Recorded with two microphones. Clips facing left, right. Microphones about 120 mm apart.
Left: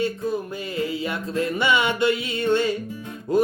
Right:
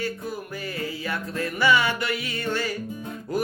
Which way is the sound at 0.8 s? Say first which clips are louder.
Left 5 dB; 25° left (ahead or behind).